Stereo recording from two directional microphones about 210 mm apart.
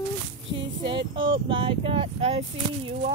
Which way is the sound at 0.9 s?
25° right (ahead or behind).